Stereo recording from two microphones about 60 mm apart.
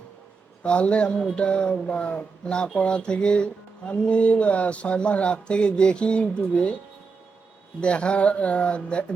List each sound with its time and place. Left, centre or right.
0.6 s speech: centre
7.8 s speech: centre